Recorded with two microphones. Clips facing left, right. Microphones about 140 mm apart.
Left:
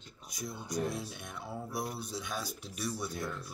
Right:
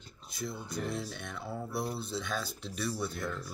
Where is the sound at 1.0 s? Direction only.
10° left (ahead or behind).